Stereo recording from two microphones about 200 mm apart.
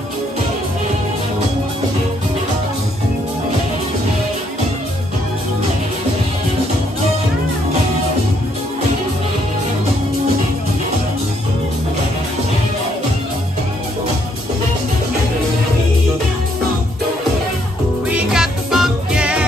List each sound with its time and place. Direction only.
18.0 s music: 5° right (ahead or behind)